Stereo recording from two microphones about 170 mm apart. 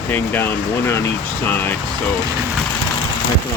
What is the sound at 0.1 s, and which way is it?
Speech, 10° left (ahead or behind).